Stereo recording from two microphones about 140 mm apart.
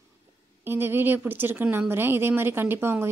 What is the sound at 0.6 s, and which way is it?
Speech, 15° right (ahead or behind).